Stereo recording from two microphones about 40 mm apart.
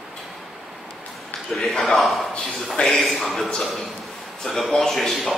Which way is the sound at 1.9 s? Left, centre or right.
Centre.